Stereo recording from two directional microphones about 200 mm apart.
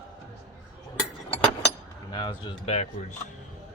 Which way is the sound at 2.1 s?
25° left (ahead or behind).